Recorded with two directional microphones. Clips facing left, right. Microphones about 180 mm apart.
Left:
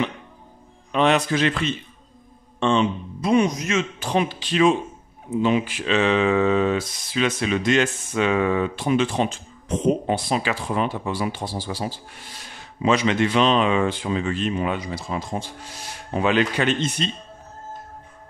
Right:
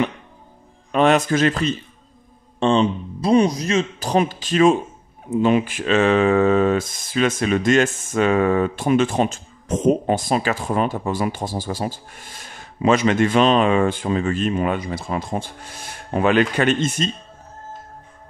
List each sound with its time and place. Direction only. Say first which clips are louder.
0.9 s speech: right 3 dB; 45° right (ahead or behind)